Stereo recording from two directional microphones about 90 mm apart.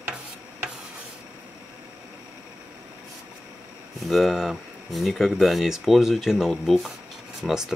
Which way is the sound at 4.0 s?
Centre (ahead or behind).